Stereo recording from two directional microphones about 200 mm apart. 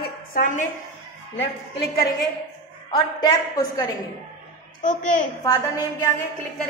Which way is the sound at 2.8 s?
20° left (ahead or behind).